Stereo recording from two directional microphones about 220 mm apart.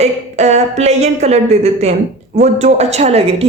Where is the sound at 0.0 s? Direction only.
30° right (ahead or behind).